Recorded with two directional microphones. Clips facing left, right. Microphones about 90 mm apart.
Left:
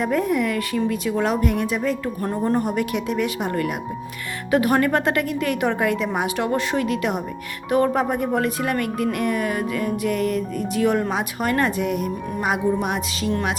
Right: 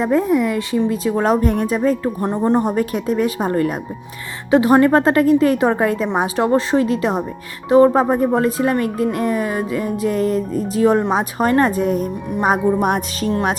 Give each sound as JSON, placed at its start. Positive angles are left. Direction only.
{"t": 0.0, "sound": "speech", "side_deg": -25}